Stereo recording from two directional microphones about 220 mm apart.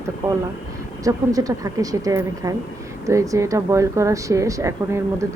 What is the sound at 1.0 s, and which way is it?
Speech, 15° right (ahead or behind).